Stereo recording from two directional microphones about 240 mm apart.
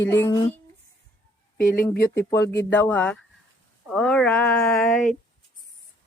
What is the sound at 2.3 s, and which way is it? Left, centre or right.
Speech, centre.